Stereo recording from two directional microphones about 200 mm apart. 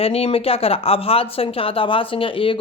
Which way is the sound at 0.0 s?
30° left (ahead or behind).